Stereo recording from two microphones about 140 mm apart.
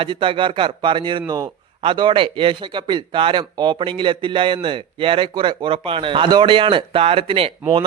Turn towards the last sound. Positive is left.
turn(degrees=-40)  # may be behind; listen again after turning